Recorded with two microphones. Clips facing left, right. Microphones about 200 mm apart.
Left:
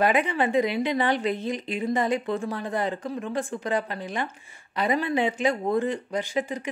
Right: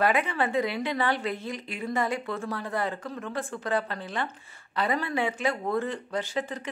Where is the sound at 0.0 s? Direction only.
15° left (ahead or behind).